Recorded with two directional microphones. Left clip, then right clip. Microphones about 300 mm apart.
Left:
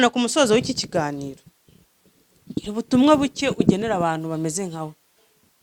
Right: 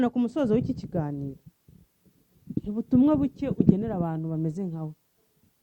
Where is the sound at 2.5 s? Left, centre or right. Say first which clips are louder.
Left 4 dB; centre.